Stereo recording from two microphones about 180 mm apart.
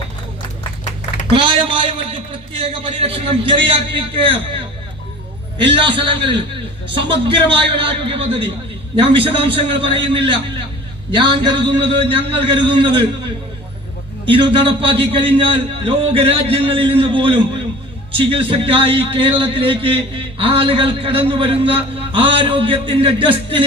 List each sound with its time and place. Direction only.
1.3 s a man's voice: 30° right (ahead or behind)
5.7 s a man's voice: 30° right (ahead or behind)